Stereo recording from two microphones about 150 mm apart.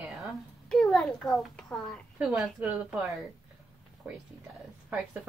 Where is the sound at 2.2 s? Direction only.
5° right (ahead or behind).